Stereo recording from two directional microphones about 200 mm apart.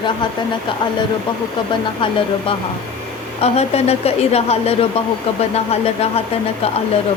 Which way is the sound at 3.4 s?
30° left (ahead or behind).